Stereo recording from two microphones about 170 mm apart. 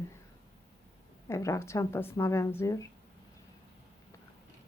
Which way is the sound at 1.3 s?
15° left (ahead or behind).